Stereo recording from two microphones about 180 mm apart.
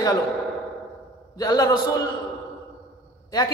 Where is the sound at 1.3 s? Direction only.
20° left (ahead or behind).